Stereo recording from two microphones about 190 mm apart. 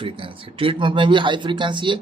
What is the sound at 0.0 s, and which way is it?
Speech, 30° right (ahead or behind).